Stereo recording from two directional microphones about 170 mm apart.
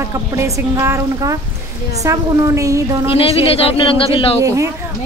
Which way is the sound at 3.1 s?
35° left (ahead or behind).